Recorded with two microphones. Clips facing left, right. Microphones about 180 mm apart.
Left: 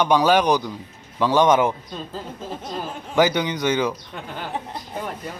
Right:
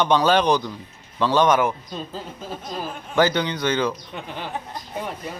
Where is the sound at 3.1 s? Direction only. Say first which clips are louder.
Left 1 dB; 15° left (ahead or behind).